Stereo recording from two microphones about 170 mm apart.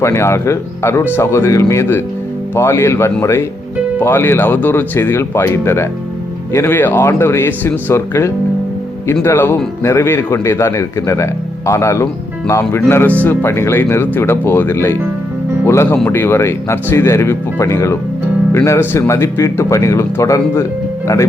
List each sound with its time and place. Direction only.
0.0 s speech: 15° left (ahead or behind)